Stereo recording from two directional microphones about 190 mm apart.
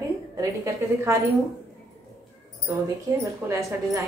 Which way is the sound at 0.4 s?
15° right (ahead or behind).